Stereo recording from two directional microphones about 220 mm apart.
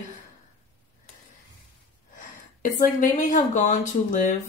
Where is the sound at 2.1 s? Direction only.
35° left (ahead or behind).